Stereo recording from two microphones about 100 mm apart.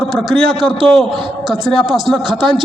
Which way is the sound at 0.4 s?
Centre (ahead or behind).